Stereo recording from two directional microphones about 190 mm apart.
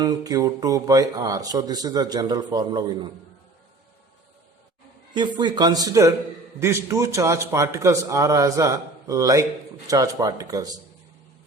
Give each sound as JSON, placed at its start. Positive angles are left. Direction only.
{"t": 0.0, "sound": "speech", "side_deg": -20}
{"t": 5.1, "sound": "a man's voice", "side_deg": -25}